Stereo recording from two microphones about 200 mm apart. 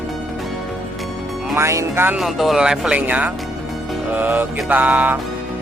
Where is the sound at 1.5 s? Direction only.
15° right (ahead or behind).